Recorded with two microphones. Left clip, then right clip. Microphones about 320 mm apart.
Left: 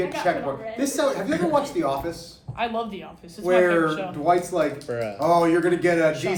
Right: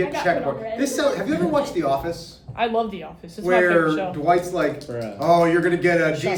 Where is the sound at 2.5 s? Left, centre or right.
Right.